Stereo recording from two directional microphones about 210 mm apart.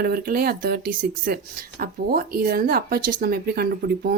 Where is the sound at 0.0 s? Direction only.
45° right (ahead or behind).